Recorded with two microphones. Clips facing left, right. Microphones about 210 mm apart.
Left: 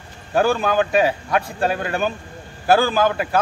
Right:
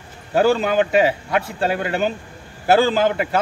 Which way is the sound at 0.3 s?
20° right (ahead or behind).